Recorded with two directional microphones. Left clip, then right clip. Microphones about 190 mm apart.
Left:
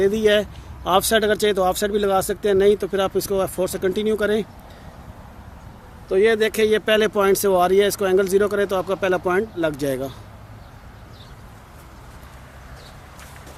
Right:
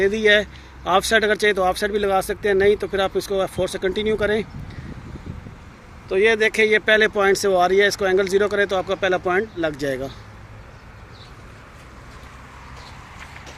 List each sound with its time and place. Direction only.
0.0 s speech: 35° left (ahead or behind)
6.1 s speech: 40° left (ahead or behind)